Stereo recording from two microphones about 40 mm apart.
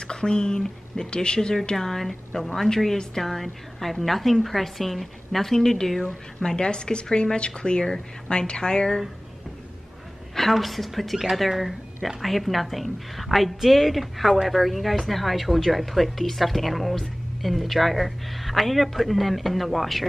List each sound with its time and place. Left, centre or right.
0.0 s speech: left
1.8 s a woman's voice: centre
10.3 s speech: centre